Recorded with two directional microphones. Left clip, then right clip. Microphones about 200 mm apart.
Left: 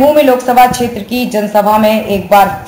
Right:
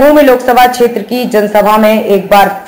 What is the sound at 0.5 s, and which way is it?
Speech, 20° right (ahead or behind).